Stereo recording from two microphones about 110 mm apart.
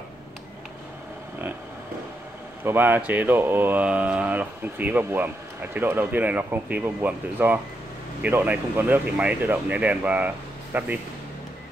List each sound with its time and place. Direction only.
2.6 s speech: 20° right (ahead or behind)